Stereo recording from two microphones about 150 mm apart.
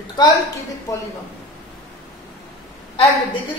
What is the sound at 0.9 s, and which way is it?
Speech, 25° left (ahead or behind).